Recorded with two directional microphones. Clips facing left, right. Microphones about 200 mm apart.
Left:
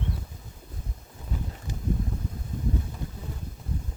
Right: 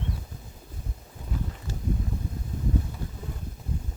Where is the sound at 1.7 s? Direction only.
15° left (ahead or behind).